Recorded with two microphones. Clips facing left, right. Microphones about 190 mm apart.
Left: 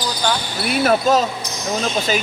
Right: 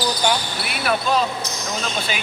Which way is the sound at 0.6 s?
40° left (ahead or behind).